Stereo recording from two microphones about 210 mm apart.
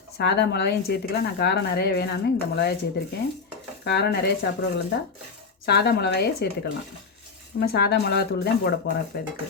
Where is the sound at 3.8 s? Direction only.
50° left (ahead or behind).